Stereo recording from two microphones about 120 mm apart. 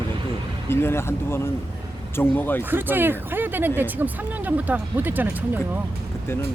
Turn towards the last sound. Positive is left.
turn(degrees=-15)  # may be behind; listen again after turning